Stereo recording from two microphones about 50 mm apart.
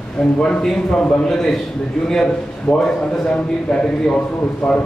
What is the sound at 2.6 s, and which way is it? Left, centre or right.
A man's voice, centre.